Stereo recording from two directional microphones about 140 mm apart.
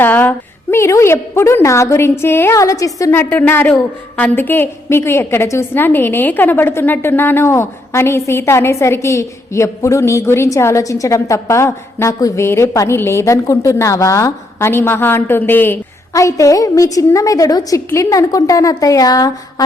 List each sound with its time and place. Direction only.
0.0 s a woman's voice: 15° left (ahead or behind)